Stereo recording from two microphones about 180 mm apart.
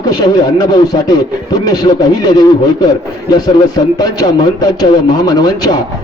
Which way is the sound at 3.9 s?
20° left (ahead or behind).